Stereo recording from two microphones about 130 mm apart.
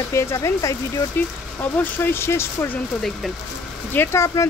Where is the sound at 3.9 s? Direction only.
25° left (ahead or behind).